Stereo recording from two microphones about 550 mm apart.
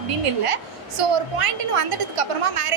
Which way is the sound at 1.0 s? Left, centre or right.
Right.